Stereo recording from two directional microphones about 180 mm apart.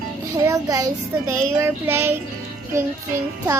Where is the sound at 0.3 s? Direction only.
20° right (ahead or behind).